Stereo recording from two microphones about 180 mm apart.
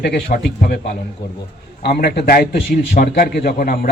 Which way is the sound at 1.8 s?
65° left (ahead or behind).